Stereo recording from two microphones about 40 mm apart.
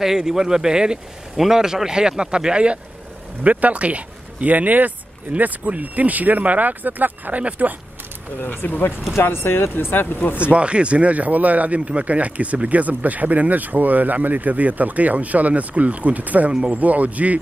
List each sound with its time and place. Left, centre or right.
0.0 s speech: centre; by 2.8 s right
3.4 s speech: right
8.4 s speech: left
9.1 s speech: left
10.3 s speech: right